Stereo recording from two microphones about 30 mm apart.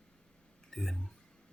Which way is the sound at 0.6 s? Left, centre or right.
Centre.